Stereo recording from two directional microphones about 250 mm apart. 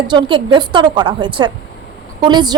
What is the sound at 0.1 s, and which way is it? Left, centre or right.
A woman's voice, centre.